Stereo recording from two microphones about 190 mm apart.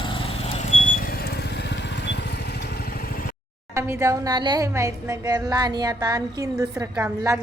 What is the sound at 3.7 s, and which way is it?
A woman's voice, 15° right (ahead or behind).